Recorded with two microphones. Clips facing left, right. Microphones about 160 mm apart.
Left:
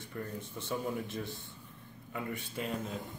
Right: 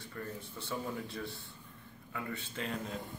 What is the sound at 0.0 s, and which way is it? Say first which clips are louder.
A man's voice: left 2 dB; 20° left (ahead or behind).